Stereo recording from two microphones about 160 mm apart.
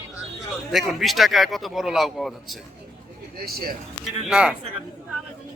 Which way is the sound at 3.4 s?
70° right (ahead or behind).